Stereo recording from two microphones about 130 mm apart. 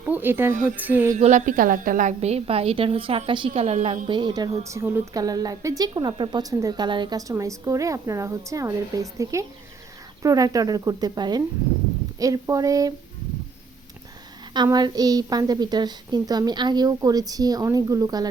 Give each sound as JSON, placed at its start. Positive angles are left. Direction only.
{"t": 0.0, "sound": "speech", "side_deg": -15}
{"t": 0.8, "sound": "a sound", "side_deg": -15}
{"t": 1.1, "sound": "a woman's voice", "side_deg": -70}
{"t": 4.1, "sound": "speech", "side_deg": -35}
{"t": 5.1, "sound": "a woman's voice", "side_deg": -30}
{"t": 14.5, "sound": "a woman's voice", "side_deg": -35}